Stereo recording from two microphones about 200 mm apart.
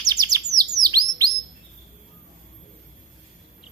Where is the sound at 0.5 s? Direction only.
20° right (ahead or behind).